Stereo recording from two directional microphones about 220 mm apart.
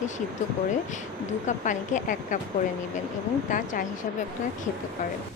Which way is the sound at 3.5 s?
35° left (ahead or behind).